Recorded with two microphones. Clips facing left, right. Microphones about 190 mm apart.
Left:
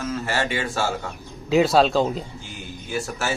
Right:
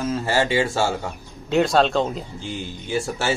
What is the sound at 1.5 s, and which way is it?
Speech, 5° left (ahead or behind).